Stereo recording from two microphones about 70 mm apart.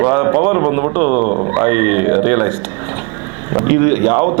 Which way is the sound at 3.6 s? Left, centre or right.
Right.